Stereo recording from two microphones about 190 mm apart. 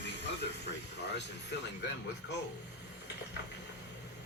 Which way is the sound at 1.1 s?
65° left (ahead or behind).